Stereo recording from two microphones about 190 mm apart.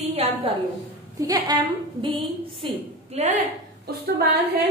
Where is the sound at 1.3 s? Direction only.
20° right (ahead or behind).